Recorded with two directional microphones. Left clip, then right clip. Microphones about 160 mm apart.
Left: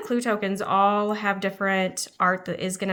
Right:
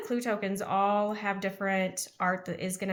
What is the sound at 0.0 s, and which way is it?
Speech, 30° left (ahead or behind).